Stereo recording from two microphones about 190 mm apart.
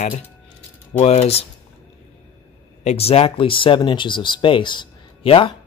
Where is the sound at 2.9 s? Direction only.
30° left (ahead or behind).